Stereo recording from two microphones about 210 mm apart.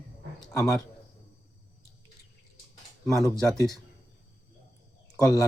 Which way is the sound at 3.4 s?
Centre (ahead or behind).